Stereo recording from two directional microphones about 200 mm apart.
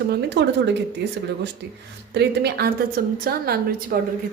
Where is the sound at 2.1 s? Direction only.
55° right (ahead or behind).